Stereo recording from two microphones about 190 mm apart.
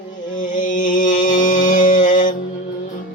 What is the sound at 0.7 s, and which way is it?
Music, 45° left (ahead or behind).